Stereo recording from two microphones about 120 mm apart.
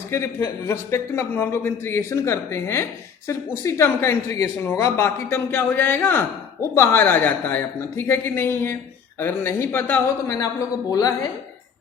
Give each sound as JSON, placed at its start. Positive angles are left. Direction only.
{"t": 0.1, "sound": "speech", "side_deg": 20}
{"t": 10.9, "sound": "speech", "side_deg": 30}